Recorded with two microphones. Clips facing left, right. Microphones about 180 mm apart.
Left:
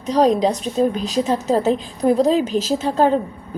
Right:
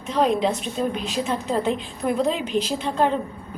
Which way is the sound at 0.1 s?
40° left (ahead or behind).